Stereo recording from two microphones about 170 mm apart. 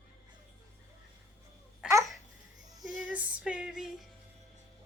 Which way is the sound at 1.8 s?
5° right (ahead or behind).